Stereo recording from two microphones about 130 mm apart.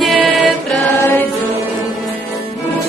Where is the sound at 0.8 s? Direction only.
15° left (ahead or behind).